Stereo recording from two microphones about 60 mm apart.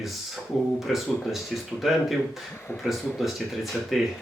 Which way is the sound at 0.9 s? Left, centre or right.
Centre.